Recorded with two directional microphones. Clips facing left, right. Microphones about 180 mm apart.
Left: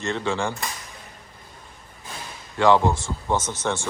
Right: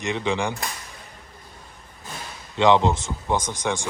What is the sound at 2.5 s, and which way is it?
Speech, 20° right (ahead or behind).